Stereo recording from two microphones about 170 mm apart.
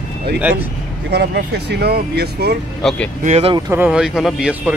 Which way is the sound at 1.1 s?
75° right (ahead or behind).